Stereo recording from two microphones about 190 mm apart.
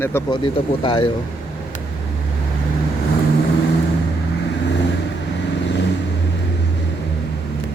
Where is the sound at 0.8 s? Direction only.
25° left (ahead or behind).